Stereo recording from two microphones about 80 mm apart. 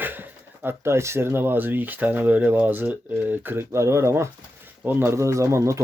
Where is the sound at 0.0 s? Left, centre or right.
Right.